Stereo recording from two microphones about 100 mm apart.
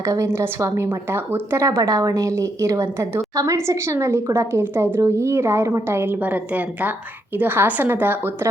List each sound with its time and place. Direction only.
0.0 s a woman's voice: 30° right (ahead or behind)